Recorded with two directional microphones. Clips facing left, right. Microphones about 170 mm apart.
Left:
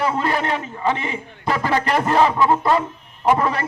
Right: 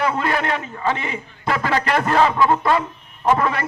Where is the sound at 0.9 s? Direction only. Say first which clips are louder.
Left 1 dB; 35° left (ahead or behind).